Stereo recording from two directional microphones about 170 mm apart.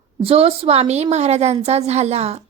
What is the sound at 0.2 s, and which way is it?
A woman's voice, 35° right (ahead or behind).